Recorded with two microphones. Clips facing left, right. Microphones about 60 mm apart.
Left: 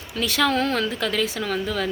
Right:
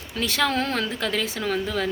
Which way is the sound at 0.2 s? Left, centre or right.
Right.